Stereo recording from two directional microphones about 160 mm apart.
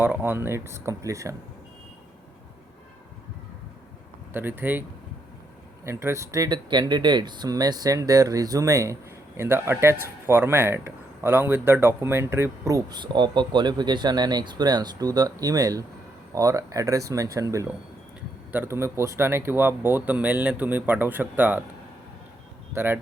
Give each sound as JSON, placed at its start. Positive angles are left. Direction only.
{"t": 0.0, "sound": "speech", "side_deg": -10}
{"t": 4.3, "sound": "speech", "side_deg": -15}
{"t": 5.8, "sound": "speech", "side_deg": -15}
{"t": 22.7, "sound": "speech", "side_deg": -15}